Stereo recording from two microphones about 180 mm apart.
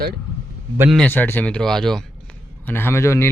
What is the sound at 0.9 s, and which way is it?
A man's voice, 10° left (ahead or behind).